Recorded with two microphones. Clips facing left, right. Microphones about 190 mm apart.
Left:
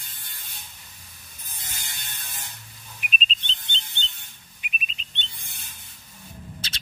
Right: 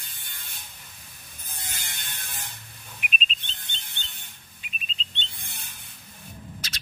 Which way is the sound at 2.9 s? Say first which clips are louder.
Left 1 dB; 40° left (ahead or behind).